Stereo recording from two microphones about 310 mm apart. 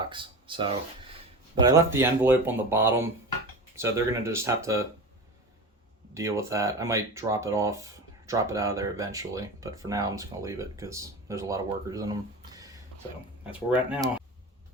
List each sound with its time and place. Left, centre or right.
0.0 s a sound: centre
1.6 s speech: centre
6.1 s speech: centre
13.7 s speech: centre